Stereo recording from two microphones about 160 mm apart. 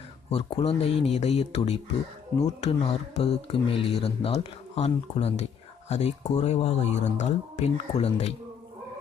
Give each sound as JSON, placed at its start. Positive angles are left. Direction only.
{"t": 0.3, "sound": "speech", "side_deg": 40}